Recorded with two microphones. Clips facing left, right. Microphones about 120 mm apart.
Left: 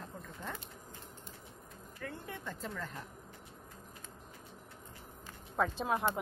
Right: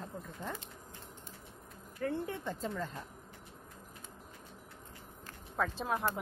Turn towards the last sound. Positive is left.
turn(degrees=0)  # may be behind; listen again after turning